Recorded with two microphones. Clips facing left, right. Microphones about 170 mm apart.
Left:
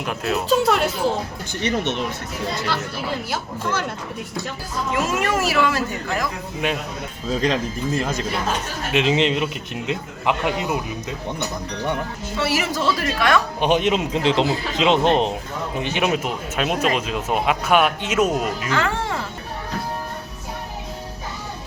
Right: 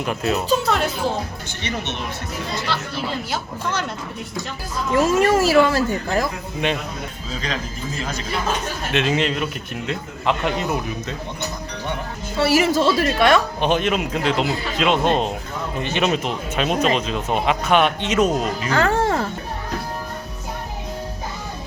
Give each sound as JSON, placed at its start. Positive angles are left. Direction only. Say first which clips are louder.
{"t": 0.0, "sound": "speech", "louder": "right 2 dB", "side_deg": 0}
{"t": 3.3, "sound": "a man's voice", "louder": "even", "side_deg": 10}
{"t": 4.9, "sound": "speech", "louder": "right 7 dB", "side_deg": -30}
{"t": 6.6, "sound": "speech", "louder": "right 1 dB", "side_deg": 5}
{"t": 7.3, "sound": "speech", "louder": "left 8 dB", "side_deg": 55}
{"t": 8.9, "sound": "a man's voice", "louder": "left 2 dB", "side_deg": 15}
{"t": 12.4, "sound": "a woman's voice", "louder": "right 6 dB", "side_deg": -30}
{"t": 13.6, "sound": "a man's voice", "louder": "left 1 dB", "side_deg": 15}
{"t": 18.7, "sound": "music", "louder": "right 7 dB", "side_deg": -40}